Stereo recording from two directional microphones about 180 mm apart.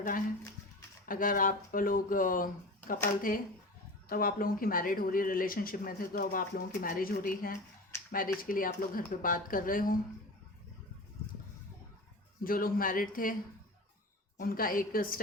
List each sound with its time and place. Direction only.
1.0 s speech: 50° left (ahead or behind)
12.4 s speech: 55° left (ahead or behind)
14.3 s speech: 55° left (ahead or behind)